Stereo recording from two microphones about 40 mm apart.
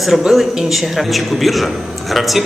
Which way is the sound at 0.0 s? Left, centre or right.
Centre.